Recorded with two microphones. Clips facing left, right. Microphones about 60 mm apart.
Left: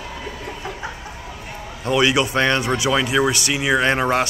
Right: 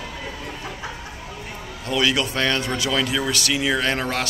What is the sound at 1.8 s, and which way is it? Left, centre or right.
Speech, centre.